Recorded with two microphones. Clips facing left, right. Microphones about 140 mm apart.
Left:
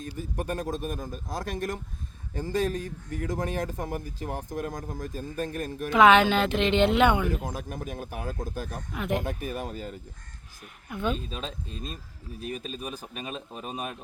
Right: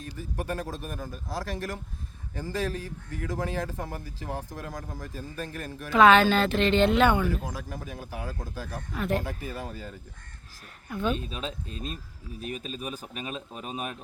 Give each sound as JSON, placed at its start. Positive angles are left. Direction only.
{"t": 0.1, "sound": "speech", "side_deg": 20}
{"t": 11.0, "sound": "a man's voice", "side_deg": -5}
{"t": 12.7, "sound": "a man's voice", "side_deg": -5}